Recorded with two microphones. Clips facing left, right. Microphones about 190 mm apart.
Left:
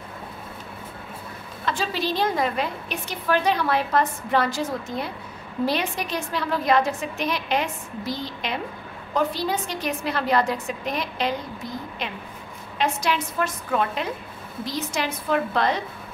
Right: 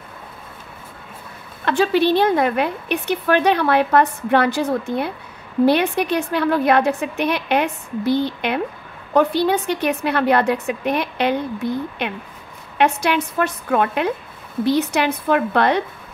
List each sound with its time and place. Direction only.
1.6 s a woman's voice: 65° right (ahead or behind)